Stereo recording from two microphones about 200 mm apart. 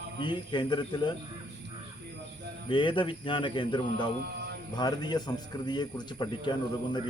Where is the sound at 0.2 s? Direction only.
25° left (ahead or behind).